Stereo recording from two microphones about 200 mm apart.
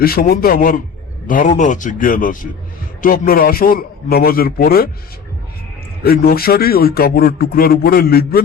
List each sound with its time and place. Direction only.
0.0 s a man's voice: 50° left (ahead or behind)
6.0 s speech: 50° left (ahead or behind)